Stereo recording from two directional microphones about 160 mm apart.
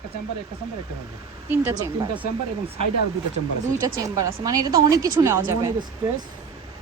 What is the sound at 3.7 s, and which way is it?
A woman's voice, 20° right (ahead or behind).